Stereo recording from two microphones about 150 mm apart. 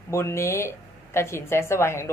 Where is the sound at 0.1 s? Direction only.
20° left (ahead or behind).